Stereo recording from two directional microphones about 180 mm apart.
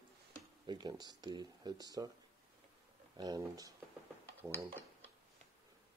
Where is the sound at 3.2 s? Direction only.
20° right (ahead or behind).